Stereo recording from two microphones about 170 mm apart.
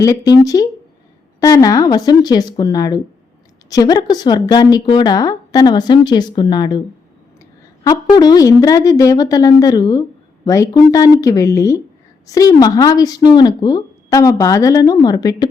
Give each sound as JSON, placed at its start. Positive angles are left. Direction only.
{"t": 0.0, "sound": "a woman's voice", "side_deg": 20}
{"t": 8.1, "sound": "a woman's voice", "side_deg": 25}